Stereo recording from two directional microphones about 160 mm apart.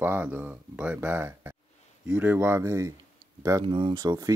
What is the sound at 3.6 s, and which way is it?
Speech, 35° right (ahead or behind).